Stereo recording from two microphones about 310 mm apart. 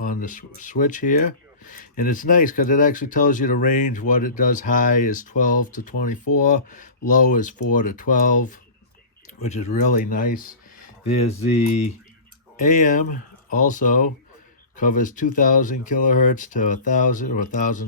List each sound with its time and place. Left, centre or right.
0.0 s speech: left